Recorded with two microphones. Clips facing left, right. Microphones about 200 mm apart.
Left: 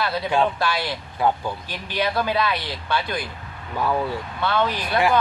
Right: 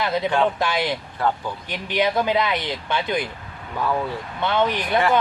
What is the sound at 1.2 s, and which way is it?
Speech, 15° left (ahead or behind).